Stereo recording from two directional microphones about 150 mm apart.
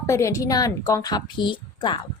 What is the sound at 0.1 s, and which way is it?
A woman's voice, 20° left (ahead or behind).